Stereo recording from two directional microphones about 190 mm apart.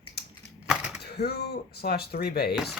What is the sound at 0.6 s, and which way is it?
Typewriter, 5° right (ahead or behind).